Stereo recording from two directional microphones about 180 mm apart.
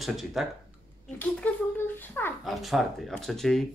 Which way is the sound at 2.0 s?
10° left (ahead or behind).